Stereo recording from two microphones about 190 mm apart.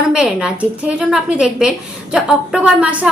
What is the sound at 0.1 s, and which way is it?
A woman's voice, 5° right (ahead or behind).